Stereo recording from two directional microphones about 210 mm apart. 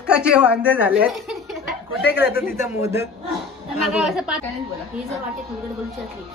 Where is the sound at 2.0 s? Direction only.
55° left (ahead or behind).